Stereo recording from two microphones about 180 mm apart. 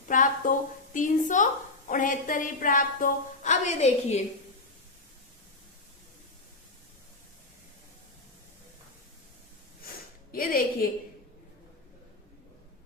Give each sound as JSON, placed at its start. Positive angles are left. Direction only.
{"t": 0.1, "sound": "a woman's voice", "side_deg": 50}
{"t": 10.3, "sound": "a woman's voice", "side_deg": 50}